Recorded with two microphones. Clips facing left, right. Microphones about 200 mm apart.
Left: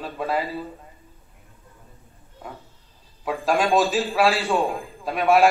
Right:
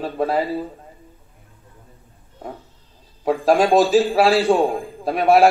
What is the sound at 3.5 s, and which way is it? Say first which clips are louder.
A man's voice: right 5 dB; 35° right (ahead or behind).